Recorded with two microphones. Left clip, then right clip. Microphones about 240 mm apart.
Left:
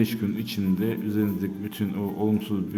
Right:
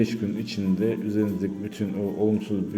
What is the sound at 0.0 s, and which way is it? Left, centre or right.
A man's voice, centre.